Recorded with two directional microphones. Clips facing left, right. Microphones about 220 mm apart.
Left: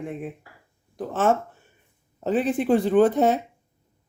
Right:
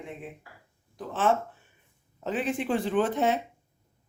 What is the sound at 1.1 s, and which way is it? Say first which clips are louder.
Speech: left 4 dB; 45° left (ahead or behind).